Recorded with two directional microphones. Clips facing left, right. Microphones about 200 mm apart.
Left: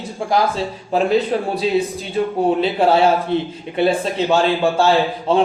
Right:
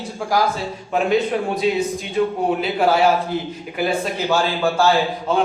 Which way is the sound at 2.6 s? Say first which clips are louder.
Left 1 dB; 30° left (ahead or behind).